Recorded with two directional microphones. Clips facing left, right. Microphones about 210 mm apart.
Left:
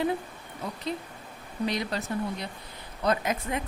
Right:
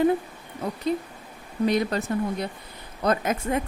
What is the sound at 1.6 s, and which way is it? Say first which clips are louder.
Speech: right 7 dB; 50° right (ahead or behind).